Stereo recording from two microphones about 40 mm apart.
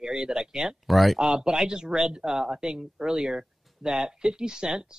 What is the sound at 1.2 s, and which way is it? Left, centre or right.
Speech, centre.